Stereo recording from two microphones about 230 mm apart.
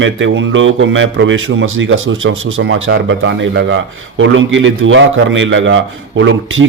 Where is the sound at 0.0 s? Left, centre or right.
Right.